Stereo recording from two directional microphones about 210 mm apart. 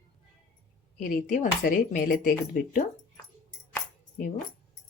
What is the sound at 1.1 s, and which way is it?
Speech, 40° left (ahead or behind).